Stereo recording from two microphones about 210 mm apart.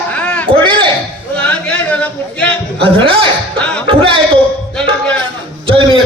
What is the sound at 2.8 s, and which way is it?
Speech, 25° right (ahead or behind).